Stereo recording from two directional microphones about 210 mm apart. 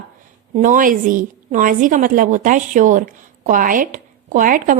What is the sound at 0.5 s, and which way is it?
A woman's voice, 40° right (ahead or behind).